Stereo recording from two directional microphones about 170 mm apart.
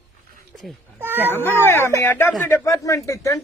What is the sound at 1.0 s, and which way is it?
Speech, 10° right (ahead or behind).